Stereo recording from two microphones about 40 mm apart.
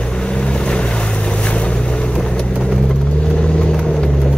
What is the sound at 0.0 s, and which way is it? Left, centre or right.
Boat, left.